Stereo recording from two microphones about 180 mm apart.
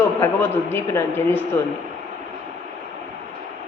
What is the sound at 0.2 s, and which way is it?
A woman's voice, 15° left (ahead or behind).